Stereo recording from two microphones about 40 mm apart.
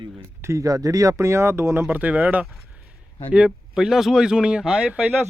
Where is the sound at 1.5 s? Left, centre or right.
Right.